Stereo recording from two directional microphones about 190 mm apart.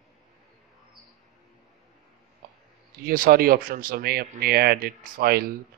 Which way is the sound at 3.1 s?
50° right (ahead or behind).